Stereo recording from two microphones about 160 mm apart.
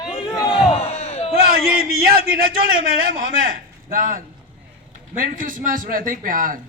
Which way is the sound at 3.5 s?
60° right (ahead or behind).